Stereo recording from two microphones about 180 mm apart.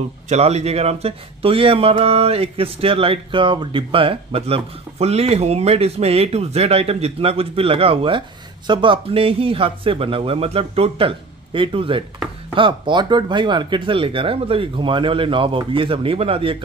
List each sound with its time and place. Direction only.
0.3 s speech: 35° right (ahead or behind)